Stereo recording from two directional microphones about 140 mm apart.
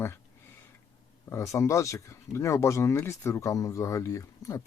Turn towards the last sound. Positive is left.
turn(degrees=20)  # may be behind; listen again after turning